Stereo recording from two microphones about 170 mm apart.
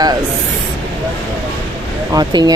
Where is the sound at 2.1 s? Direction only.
25° right (ahead or behind).